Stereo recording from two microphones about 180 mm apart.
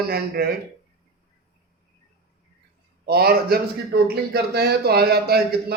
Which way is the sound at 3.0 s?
60° right (ahead or behind).